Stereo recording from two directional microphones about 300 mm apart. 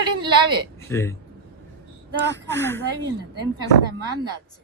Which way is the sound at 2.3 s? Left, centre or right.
Centre.